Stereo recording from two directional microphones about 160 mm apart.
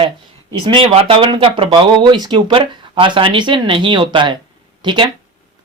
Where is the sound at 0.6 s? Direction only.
35° right (ahead or behind).